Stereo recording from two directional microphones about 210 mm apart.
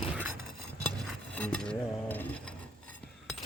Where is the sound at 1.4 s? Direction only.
5° left (ahead or behind).